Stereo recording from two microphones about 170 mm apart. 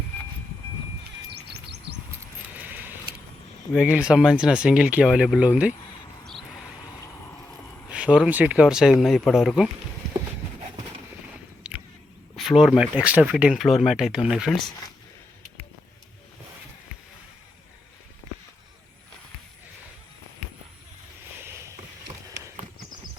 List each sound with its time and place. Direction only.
1.3 s chirp: 70° right (ahead or behind)
2.6 s keys jangling: 10° right (ahead or behind)
3.8 s speech: 5° right (ahead or behind)
6.2 s a sound: centre (ahead or behind)
7.9 s speech: 5° right (ahead or behind)
11.6 s squish: 5° right (ahead or behind)
12.4 s speech: centre (ahead or behind)
21.4 s rowboat: 15° right (ahead or behind)